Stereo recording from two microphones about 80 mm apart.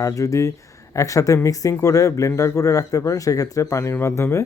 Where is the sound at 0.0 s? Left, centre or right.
Left.